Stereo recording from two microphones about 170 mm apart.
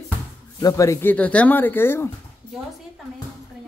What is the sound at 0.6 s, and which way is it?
Speech, 20° left (ahead or behind).